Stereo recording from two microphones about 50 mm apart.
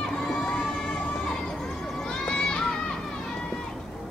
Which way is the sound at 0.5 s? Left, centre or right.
Centre.